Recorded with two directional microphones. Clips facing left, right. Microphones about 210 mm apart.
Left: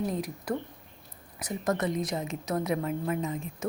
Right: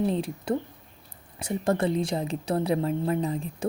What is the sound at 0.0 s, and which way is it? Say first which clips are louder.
A woman's voice: right 5 dB; 30° right (ahead or behind).